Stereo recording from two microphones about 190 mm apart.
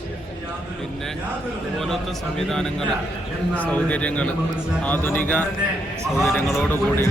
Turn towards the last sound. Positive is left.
turn(degrees=10)  # may be behind; listen again after turning